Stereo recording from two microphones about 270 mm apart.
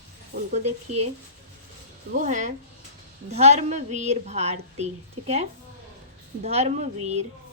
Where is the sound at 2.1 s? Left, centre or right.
Right.